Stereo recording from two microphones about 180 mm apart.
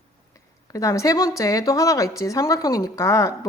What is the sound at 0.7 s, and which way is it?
A woman's voice, 15° left (ahead or behind).